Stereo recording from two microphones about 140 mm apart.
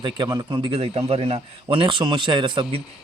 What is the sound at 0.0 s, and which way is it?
A man's voice, 30° right (ahead or behind).